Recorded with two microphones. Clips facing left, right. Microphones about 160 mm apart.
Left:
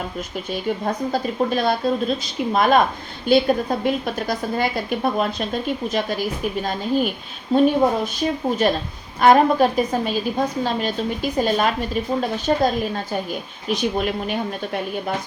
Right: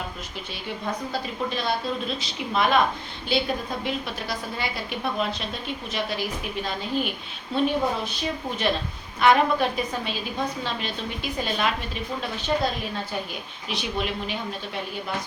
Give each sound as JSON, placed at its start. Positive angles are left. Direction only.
{"t": 0.5, "sound": "a woman's voice", "side_deg": 45}
{"t": 13.7, "sound": "a woman's voice", "side_deg": 45}